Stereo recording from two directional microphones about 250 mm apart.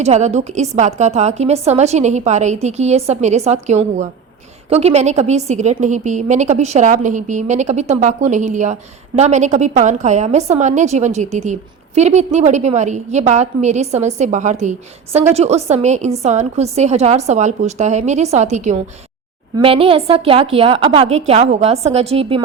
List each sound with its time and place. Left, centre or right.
0.0 s a woman's voice: right